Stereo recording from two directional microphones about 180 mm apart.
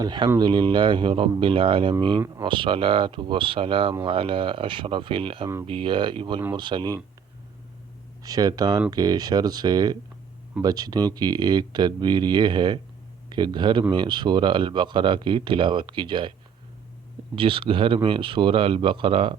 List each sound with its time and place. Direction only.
0.0 s speech: 25° right (ahead or behind)
8.2 s speech: 20° right (ahead or behind)
17.3 s speech: 30° right (ahead or behind)